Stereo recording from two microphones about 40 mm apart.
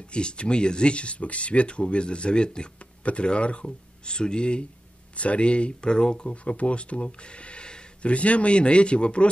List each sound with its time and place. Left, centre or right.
0.1 s speech: left
6.4 s speech: left